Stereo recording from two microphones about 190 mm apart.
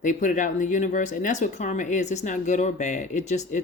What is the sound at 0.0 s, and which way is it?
Speech, 45° left (ahead or behind).